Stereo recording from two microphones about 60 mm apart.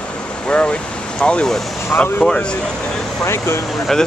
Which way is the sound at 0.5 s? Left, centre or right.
Centre.